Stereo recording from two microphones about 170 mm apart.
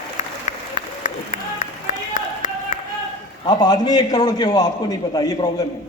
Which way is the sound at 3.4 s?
25° left (ahead or behind).